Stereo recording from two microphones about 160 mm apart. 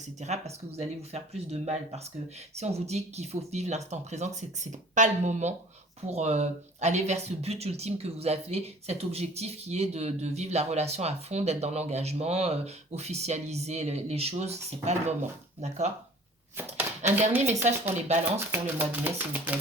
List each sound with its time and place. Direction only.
0.2 s speech: 45° right (ahead or behind)
17.5 s speech: 45° right (ahead or behind)
18.3 s speech: 15° right (ahead or behind)